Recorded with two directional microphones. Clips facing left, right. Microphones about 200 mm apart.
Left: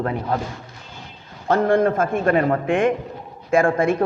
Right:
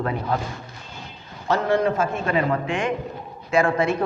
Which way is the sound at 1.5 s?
55° left (ahead or behind).